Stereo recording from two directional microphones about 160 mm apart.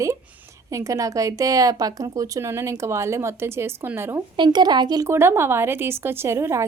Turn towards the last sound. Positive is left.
turn(degrees=-15)  # may be behind; listen again after turning